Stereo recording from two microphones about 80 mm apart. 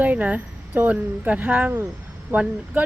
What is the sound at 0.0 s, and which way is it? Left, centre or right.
Speech, right.